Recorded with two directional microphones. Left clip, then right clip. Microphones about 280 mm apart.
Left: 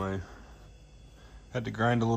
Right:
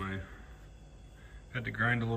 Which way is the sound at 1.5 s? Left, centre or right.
Centre.